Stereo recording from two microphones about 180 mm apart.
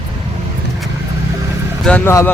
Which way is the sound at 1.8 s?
10° left (ahead or behind).